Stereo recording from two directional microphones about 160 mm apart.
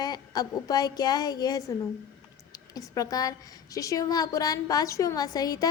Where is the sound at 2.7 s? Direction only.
20° left (ahead or behind).